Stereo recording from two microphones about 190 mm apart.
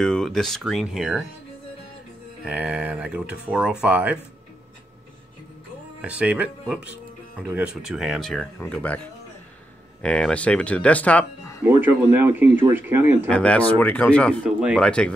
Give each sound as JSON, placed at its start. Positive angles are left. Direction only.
{"t": 0.0, "sound": "speech", "side_deg": 5}
{"t": 2.4, "sound": "speech", "side_deg": -5}
{"t": 5.9, "sound": "speech", "side_deg": -5}
{"t": 10.0, "sound": "speech", "side_deg": 5}
{"t": 11.6, "sound": "speech", "side_deg": -10}
{"t": 13.3, "sound": "speech", "side_deg": 5}
{"t": 14.4, "sound": "speech", "side_deg": -5}
{"t": 14.8, "sound": "speech", "side_deg": 5}